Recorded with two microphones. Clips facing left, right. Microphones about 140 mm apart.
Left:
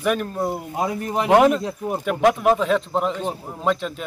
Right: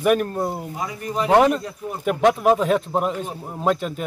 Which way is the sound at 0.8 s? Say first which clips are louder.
Left 5 dB; 60° left (ahead or behind).